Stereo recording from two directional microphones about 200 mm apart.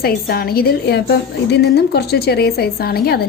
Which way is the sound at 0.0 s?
50° left (ahead or behind).